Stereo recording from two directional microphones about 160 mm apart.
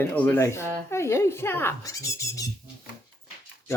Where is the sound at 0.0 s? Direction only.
10° left (ahead or behind).